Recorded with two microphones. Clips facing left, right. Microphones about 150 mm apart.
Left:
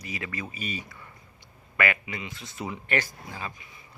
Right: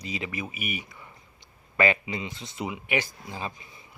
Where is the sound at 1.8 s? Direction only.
25° right (ahead or behind).